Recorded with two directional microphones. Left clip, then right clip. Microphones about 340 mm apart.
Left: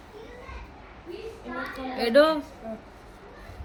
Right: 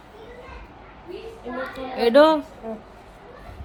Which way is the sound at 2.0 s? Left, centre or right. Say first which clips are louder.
Right 5 dB; centre.